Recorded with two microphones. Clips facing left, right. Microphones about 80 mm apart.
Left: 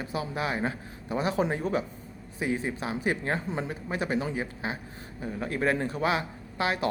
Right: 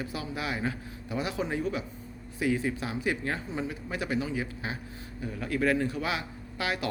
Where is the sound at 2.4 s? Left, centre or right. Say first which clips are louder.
Right 1 dB; left.